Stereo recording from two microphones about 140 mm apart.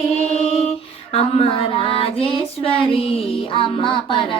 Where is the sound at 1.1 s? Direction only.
45° left (ahead or behind).